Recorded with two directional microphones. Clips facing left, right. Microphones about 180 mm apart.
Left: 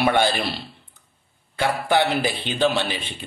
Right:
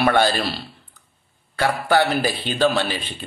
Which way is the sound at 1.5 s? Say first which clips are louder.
Right 2 dB; 20° left (ahead or behind).